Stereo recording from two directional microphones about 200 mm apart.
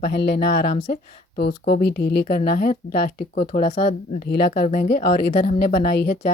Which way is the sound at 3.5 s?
35° left (ahead or behind).